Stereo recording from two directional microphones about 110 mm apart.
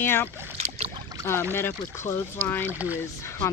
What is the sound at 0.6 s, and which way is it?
Boat, 70° right (ahead or behind).